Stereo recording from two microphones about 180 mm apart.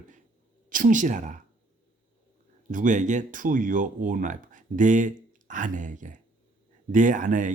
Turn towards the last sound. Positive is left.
turn(degrees=-45)  # may be behind; listen again after turning